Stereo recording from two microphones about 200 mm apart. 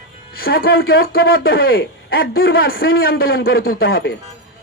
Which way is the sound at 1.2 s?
75° left (ahead or behind).